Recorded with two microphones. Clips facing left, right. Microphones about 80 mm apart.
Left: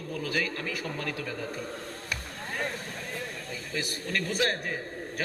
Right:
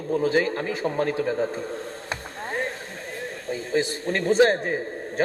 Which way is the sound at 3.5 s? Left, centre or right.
Right.